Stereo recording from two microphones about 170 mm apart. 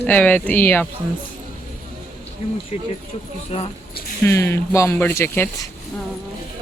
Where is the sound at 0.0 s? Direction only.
10° left (ahead or behind).